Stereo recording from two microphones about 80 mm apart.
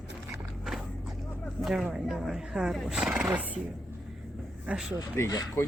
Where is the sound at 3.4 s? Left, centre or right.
Centre.